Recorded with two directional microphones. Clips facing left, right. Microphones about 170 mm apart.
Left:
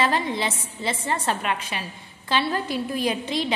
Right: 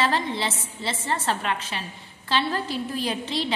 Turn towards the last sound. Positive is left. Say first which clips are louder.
# left 3 dB
turn(degrees=15)  # may be behind; listen again after turning